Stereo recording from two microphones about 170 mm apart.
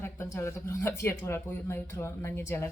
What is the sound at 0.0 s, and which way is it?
Speech, 15° left (ahead or behind).